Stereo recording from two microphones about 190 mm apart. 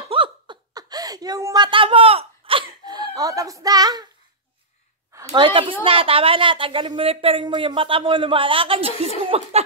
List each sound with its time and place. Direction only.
0.1 s laughter: 25° right (ahead or behind)
5.2 s a woman's voice: 25° right (ahead or behind)